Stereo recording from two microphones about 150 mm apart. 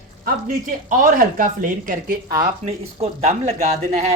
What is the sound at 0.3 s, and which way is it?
Speech, 65° right (ahead or behind).